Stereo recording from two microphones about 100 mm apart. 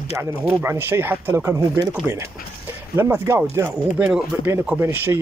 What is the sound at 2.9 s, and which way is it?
Speech, 30° right (ahead or behind).